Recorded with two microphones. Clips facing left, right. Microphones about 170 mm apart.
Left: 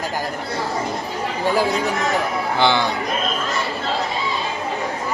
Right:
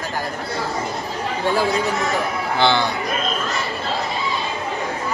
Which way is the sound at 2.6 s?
15° left (ahead or behind).